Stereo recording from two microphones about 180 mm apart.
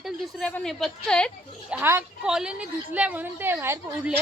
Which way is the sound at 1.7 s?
10° right (ahead or behind).